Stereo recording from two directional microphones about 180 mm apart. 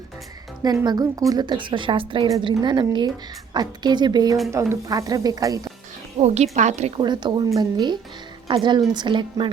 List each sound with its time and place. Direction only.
0.6 s a woman's voice: 20° right (ahead or behind)
6.1 s a woman's voice: 35° right (ahead or behind)
7.0 s a woman's voice: 25° right (ahead or behind)